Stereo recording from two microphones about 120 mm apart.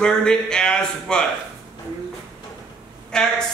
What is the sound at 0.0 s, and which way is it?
Speech, 5° left (ahead or behind).